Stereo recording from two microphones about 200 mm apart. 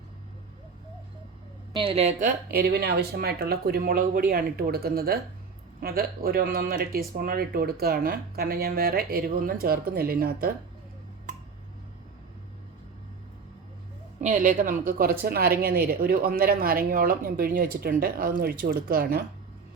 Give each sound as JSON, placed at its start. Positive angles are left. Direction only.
{"t": 1.7, "sound": "speech", "side_deg": -25}
{"t": 14.2, "sound": "speech", "side_deg": -40}